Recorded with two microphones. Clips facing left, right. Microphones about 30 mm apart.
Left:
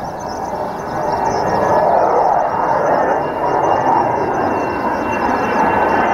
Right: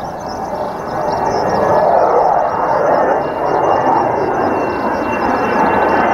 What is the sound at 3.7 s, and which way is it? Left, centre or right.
Vehicle, centre.